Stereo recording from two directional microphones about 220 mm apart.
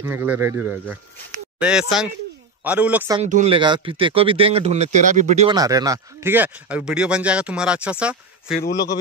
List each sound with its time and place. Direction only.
0.0 s speech: 10° right (ahead or behind)
3.2 s speech: 30° right (ahead or behind)
5.5 s speech: 15° right (ahead or behind)